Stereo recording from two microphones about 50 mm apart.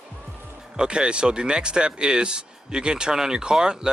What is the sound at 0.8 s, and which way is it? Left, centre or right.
Speech, centre.